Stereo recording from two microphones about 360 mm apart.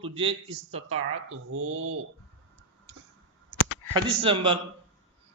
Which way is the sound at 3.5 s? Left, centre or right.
Left.